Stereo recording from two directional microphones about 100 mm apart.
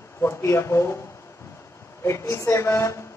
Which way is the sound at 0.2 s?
25° left (ahead or behind).